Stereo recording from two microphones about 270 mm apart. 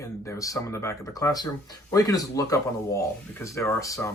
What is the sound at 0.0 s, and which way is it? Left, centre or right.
Speech, centre.